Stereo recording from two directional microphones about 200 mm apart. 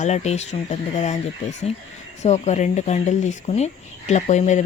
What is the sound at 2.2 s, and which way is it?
Speech, 35° left (ahead or behind).